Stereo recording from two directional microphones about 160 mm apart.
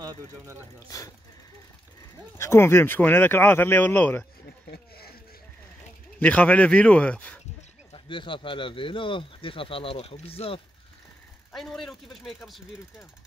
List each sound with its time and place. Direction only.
0.0 s speech: 25° right (ahead or behind)
0.8 s speech: 20° left (ahead or behind)
2.3 s speech: 15° left (ahead or behind)
4.6 s a sound: 75° left (ahead or behind)
6.1 s speech: 10° left (ahead or behind)
7.9 s speech: 30° left (ahead or behind)
11.5 s speech: centre (ahead or behind)